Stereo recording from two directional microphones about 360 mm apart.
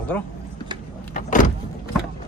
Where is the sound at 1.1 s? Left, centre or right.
Left.